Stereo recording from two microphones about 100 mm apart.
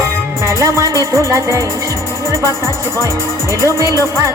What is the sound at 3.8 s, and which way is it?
Music, 35° left (ahead or behind).